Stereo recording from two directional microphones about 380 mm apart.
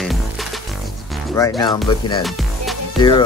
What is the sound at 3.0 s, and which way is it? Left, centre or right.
Speech, centre.